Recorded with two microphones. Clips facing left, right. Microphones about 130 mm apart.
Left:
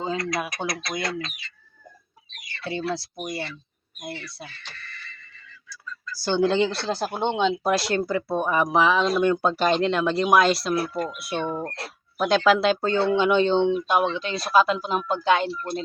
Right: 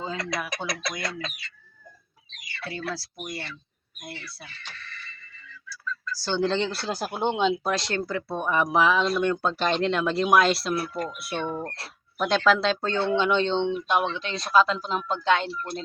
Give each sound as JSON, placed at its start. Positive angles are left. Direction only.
{"t": 0.0, "sound": "speech", "side_deg": 20}
{"t": 2.7, "sound": "speech", "side_deg": 25}
{"t": 6.1, "sound": "speech", "side_deg": 15}
{"t": 6.8, "sound": "speech", "side_deg": -10}
{"t": 7.6, "sound": "speech", "side_deg": 10}